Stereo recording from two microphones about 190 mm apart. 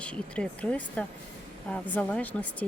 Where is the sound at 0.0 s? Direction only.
5° left (ahead or behind).